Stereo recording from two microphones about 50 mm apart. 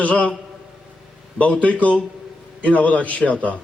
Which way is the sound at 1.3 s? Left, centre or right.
Left.